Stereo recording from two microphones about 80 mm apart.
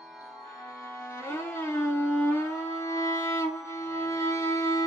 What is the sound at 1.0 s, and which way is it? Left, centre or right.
Music, left.